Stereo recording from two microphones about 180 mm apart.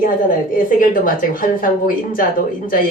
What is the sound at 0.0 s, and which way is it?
A woman's voice, 50° left (ahead or behind).